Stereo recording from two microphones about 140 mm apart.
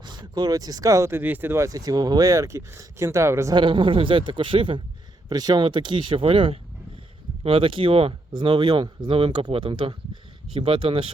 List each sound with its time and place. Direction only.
0.0 s speech: 30° right (ahead or behind)
3.5 s speech: 35° right (ahead or behind)